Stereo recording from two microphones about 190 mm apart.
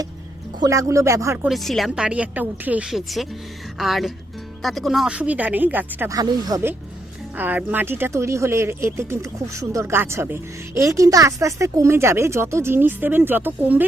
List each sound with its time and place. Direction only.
0.6 s speech: 15° right (ahead or behind)
1.5 s a woman's voice: centre (ahead or behind)